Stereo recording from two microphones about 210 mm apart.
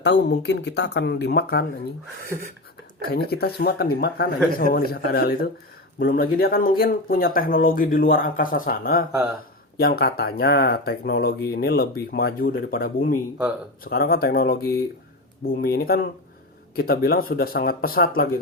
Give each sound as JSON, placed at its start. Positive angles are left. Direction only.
{"t": 0.0, "sound": "speech", "side_deg": 55}
{"t": 3.1, "sound": "speech", "side_deg": 50}